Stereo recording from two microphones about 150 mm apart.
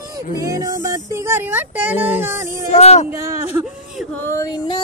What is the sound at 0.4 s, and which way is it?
Music, 20° right (ahead or behind).